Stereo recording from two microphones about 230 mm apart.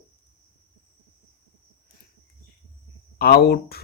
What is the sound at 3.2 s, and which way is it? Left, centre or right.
Speech, left.